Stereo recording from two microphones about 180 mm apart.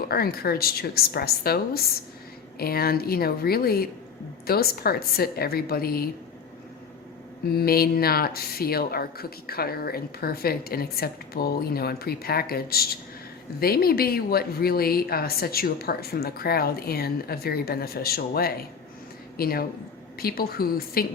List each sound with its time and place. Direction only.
0.1 s speech: 60° left (ahead or behind)
7.5 s speech: 60° left (ahead or behind)